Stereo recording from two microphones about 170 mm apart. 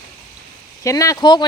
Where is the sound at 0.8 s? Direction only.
20° left (ahead or behind).